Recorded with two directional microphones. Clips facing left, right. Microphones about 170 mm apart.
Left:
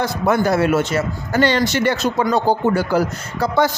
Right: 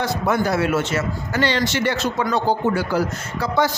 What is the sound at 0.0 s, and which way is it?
A man's voice, 45° left (ahead or behind).